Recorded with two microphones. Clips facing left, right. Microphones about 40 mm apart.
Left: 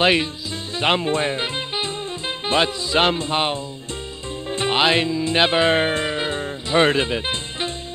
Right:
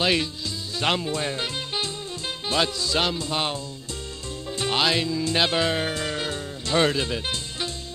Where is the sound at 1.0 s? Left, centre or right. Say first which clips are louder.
Left 6 dB; left.